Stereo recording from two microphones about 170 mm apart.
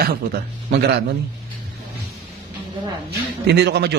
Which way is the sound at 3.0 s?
85° right.